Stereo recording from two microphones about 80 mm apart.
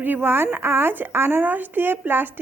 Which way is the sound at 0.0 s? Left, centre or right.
Right.